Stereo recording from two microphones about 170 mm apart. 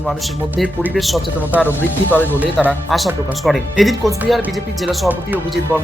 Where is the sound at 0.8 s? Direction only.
Centre (ahead or behind).